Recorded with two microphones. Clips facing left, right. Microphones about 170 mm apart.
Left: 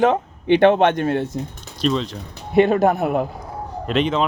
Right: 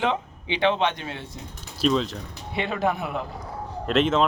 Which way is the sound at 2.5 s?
45° left (ahead or behind).